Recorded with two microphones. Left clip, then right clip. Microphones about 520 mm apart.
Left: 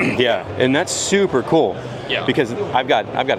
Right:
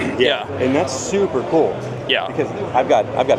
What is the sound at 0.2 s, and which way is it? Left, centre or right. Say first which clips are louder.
Speech: right 3 dB; left.